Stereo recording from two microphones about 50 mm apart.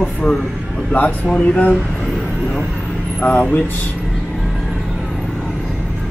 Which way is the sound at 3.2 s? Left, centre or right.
Left.